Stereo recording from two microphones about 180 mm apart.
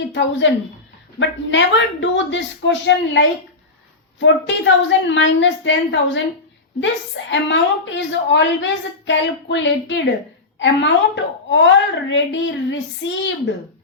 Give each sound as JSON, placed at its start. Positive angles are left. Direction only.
{"t": 0.1, "sound": "a woman's voice", "side_deg": 85}